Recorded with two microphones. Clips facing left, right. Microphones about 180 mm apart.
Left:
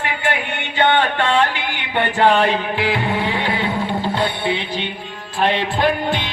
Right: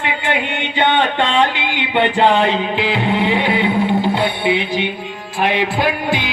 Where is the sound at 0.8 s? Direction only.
15° right (ahead or behind).